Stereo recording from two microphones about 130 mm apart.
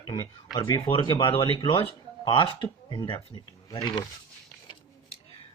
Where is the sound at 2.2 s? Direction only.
40° left (ahead or behind).